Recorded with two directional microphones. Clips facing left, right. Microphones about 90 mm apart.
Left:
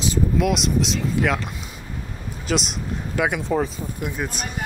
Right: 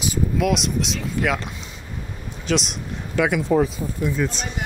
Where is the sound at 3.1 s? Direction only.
20° left (ahead or behind).